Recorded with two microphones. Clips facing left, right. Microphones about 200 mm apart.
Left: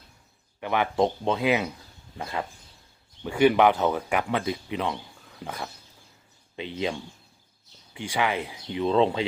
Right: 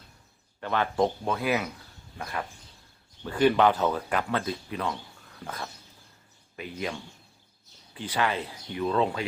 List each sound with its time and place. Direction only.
0.6 s speech: 15° left (ahead or behind)
6.6 s speech: 25° left (ahead or behind)
7.9 s speech: 10° left (ahead or behind)